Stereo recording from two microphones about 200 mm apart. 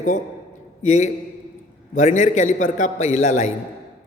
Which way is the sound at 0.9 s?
35° left (ahead or behind).